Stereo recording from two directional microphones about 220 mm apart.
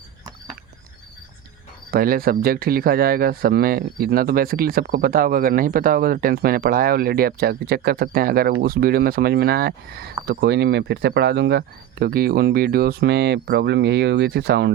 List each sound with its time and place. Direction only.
1.9 s speech: 40° right (ahead or behind)